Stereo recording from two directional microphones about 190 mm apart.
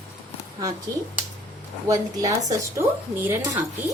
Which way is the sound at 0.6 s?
15° right (ahead or behind).